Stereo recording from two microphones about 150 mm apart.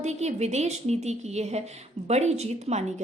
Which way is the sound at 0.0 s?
50° right (ahead or behind).